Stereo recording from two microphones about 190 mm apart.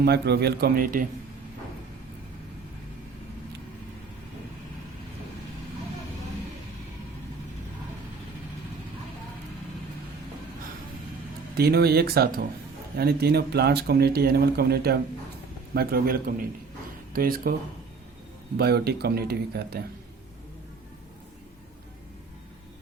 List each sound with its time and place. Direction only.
0.0 s speech: 60° right (ahead or behind)
11.5 s a man's voice: 55° right (ahead or behind)
18.5 s speech: 60° right (ahead or behind)